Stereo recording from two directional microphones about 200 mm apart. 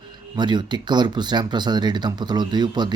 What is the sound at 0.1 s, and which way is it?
Speech, 20° right (ahead or behind).